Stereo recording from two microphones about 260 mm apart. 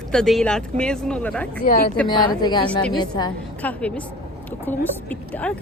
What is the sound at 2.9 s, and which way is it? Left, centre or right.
A woman's voice, centre.